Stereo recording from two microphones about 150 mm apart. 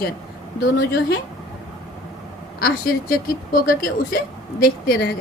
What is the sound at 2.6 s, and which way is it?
A woman's voice, 75° left (ahead or behind).